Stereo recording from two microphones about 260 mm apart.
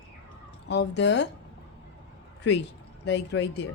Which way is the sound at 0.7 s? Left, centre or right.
Left.